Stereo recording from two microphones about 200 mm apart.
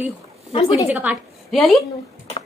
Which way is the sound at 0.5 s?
25° left (ahead or behind).